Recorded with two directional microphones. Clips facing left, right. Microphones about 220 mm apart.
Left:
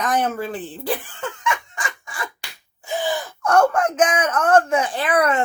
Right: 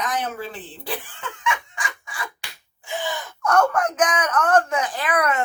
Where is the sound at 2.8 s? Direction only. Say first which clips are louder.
Left 5 dB; 35° left (ahead or behind).